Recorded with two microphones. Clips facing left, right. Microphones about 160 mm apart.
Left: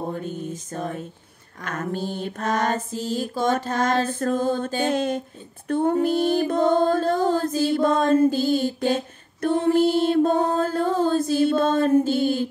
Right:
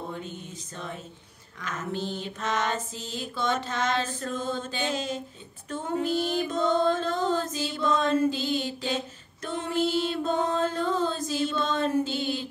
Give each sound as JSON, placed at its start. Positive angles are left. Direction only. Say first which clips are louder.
{"t": 0.1, "sound": "a sound", "louder": "left 8 dB", "side_deg": 45}
{"t": 1.6, "sound": "mantra", "louder": "left 4 dB", "side_deg": 55}
{"t": 4.0, "sound": "mantra", "louder": "left 9 dB", "side_deg": 55}
{"t": 11.1, "sound": "mantra", "louder": "left 9 dB", "side_deg": 55}